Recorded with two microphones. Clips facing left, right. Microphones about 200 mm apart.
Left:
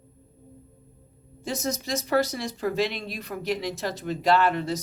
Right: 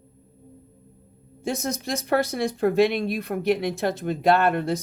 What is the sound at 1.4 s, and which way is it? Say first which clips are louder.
Speech: right 2 dB; 55° right (ahead or behind).